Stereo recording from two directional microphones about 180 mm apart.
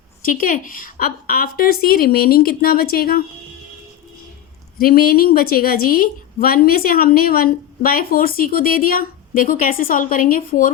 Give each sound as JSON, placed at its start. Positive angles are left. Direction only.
{"t": 0.2, "sound": "a woman's voice", "side_deg": 50}
{"t": 4.8, "sound": "a woman's voice", "side_deg": 55}